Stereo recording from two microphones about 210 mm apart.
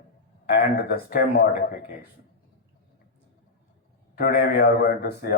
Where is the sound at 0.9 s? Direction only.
45° left (ahead or behind).